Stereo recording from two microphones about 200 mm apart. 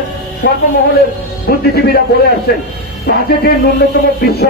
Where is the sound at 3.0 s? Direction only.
50° left (ahead or behind).